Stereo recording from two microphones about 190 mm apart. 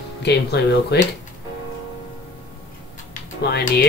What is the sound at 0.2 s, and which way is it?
Speech, 60° left (ahead or behind).